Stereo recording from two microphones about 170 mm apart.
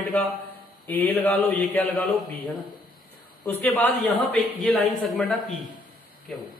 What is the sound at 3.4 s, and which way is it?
A man's voice, 10° left (ahead or behind).